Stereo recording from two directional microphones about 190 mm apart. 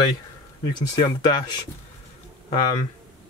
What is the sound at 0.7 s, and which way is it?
Speech, 25° left (ahead or behind).